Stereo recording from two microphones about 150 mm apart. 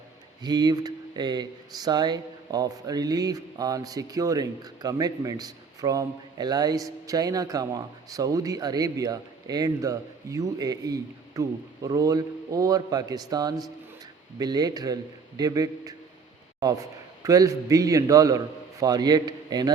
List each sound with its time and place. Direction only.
0.4 s speech: 30° right (ahead or behind)
17.2 s speech: 20° right (ahead or behind)